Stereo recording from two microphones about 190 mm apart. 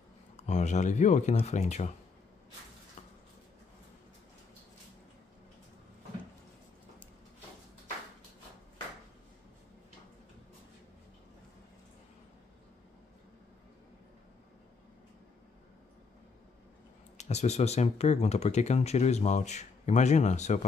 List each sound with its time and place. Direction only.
0.4 s speech: 40° left (ahead or behind)
17.2 s speech: 35° left (ahead or behind)